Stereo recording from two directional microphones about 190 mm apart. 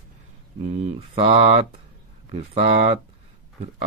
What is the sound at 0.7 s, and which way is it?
Speech, 30° right (ahead or behind).